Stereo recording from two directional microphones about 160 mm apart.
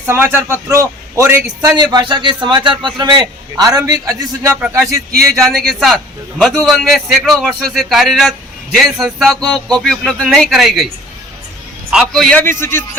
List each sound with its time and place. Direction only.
0.0 s a man's voice: 15° right (ahead or behind)
5.5 s a man's voice: centre (ahead or behind)
11.9 s a man's voice: centre (ahead or behind)
12.4 s speech: 15° left (ahead or behind)